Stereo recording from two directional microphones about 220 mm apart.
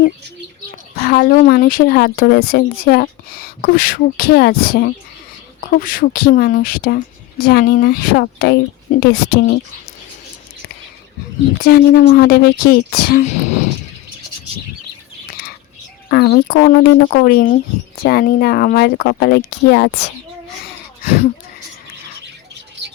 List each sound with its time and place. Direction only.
0.9 s speech: 45° left (ahead or behind)
11.6 s speech: 45° left (ahead or behind)
15.3 s bird: 40° left (ahead or behind)
16.0 s speech: 45° left (ahead or behind)